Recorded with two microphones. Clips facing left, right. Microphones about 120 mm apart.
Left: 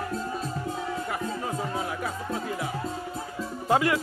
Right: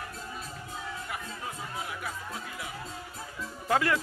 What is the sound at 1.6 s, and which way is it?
Music, 40° left (ahead or behind).